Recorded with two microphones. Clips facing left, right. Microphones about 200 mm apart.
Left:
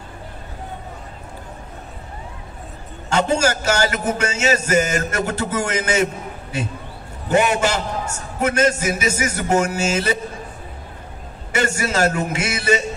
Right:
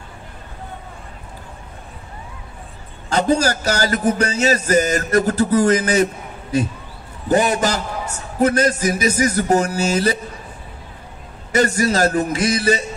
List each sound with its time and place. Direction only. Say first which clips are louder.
3.1 s music: right 1 dB; 35° right (ahead or behind)
11.5 s music: right 4 dB; 40° right (ahead or behind)